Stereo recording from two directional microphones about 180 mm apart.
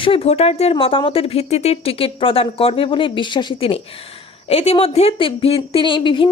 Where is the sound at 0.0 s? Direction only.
30° left (ahead or behind).